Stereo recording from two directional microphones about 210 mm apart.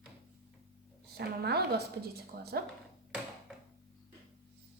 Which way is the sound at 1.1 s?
50° right (ahead or behind).